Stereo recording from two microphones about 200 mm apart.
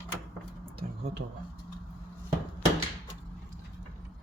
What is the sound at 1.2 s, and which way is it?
Speech, 55° right (ahead or behind).